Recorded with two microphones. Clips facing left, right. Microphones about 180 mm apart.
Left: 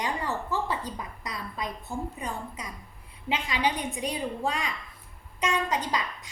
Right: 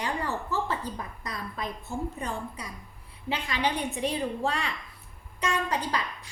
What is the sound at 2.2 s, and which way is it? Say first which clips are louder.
Speech: right 1 dB; 35° right (ahead or behind).